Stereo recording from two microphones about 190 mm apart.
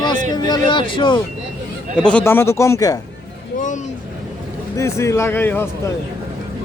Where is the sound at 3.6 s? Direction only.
40° left (ahead or behind).